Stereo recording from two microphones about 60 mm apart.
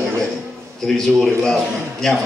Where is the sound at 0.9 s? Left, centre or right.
Centre.